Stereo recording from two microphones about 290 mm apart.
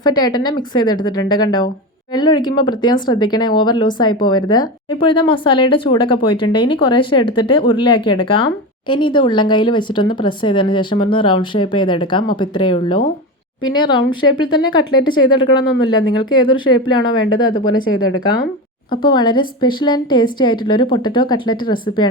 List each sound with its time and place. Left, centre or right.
0.0 s speech: centre
18.9 s speech: centre